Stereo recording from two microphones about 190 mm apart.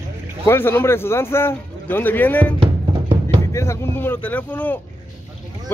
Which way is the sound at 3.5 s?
15° left (ahead or behind).